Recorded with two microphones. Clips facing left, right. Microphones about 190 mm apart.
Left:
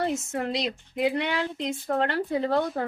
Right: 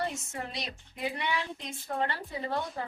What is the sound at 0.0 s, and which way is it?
A woman's voice, 80° left.